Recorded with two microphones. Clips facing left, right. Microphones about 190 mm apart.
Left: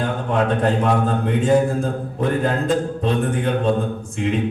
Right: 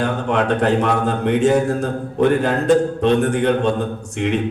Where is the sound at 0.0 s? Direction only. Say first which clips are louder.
Right 2 dB; 75° right (ahead or behind).